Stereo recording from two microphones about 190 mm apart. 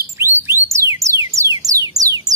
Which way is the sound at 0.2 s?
15° right (ahead or behind).